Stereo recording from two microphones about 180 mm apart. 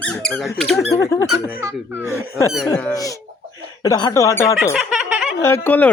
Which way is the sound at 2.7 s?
15° left (ahead or behind).